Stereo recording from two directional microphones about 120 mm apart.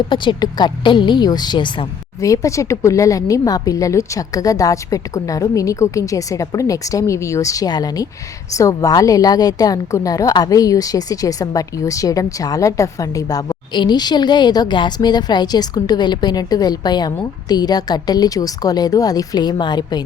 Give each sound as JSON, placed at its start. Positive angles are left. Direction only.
{"t": 0.1, "sound": "a woman's voice", "side_deg": 35}
{"t": 2.2, "sound": "a woman's voice", "side_deg": 25}